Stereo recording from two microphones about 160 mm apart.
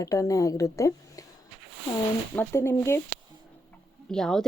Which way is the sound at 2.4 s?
20° left (ahead or behind).